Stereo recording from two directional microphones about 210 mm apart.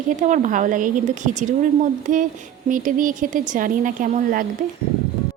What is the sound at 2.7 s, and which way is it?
A woman's voice, 40° right (ahead or behind).